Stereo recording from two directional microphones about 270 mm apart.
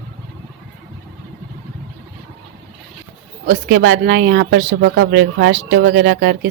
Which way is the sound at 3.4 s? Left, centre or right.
Right.